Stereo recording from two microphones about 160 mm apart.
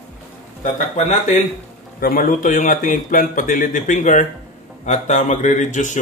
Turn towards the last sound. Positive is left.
turn(degrees=50)  # may be behind; listen again after turning